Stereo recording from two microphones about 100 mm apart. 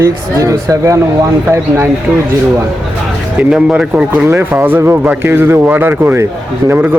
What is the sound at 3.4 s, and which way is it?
Speech, 10° right (ahead or behind).